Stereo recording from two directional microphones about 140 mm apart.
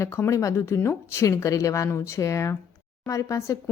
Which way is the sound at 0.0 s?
20° left (ahead or behind).